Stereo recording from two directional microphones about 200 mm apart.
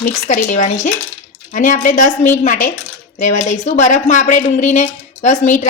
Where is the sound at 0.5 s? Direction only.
40° left (ahead or behind).